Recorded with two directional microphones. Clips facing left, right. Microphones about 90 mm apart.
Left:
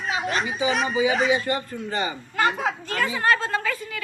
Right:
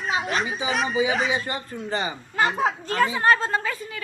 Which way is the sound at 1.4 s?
25° right (ahead or behind).